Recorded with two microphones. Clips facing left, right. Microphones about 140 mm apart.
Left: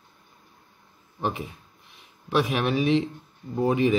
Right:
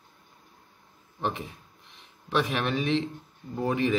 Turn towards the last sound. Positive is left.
turn(degrees=15)  # may be behind; listen again after turning